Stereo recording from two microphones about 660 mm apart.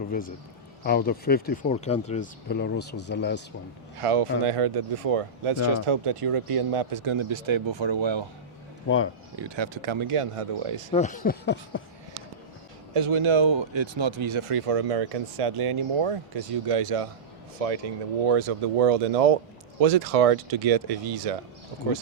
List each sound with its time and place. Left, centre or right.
0.1 s speech: centre
4.0 s speech: right
9.3 s speech: right
10.9 s speech: centre
12.9 s speech: right